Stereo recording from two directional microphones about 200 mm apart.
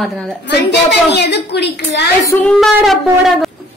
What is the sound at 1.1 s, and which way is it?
Speech, 55° left (ahead or behind).